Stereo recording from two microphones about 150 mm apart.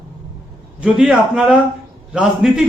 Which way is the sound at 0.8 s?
5° right (ahead or behind).